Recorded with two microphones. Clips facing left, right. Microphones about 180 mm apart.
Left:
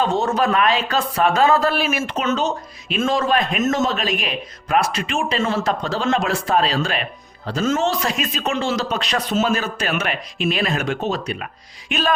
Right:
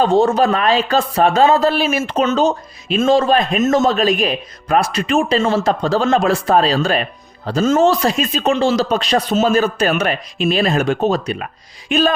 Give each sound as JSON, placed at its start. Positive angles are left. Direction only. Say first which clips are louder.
{"t": 0.0, "sound": "speech", "louder": "right 6 dB", "side_deg": -30}